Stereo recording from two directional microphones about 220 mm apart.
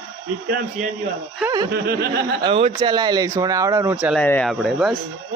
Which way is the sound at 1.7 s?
45° right (ahead or behind).